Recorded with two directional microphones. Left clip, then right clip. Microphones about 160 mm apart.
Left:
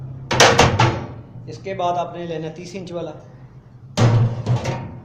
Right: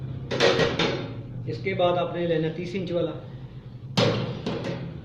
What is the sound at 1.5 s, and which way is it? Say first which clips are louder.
Speech: left 1 dB; 15° right (ahead or behind).